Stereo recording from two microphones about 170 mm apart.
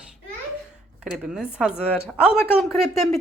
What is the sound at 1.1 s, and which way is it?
Speech, 5° right (ahead or behind).